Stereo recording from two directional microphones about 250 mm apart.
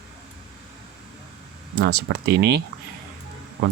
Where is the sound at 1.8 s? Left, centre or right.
Right.